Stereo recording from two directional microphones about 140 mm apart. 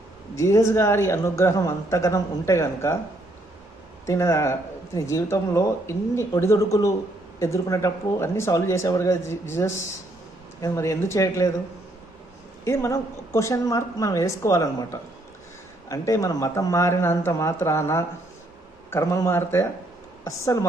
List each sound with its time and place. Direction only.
0.3 s a woman's voice: 20° left (ahead or behind)
4.0 s a woman's voice: 20° left (ahead or behind)
12.6 s a woman's voice: 20° left (ahead or behind)